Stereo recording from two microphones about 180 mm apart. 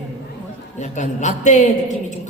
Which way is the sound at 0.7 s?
40° left (ahead or behind).